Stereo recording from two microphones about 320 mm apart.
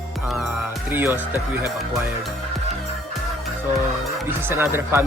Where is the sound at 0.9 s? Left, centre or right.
Centre.